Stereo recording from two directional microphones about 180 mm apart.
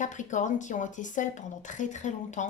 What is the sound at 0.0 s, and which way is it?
A woman's voice, 45° left (ahead or behind).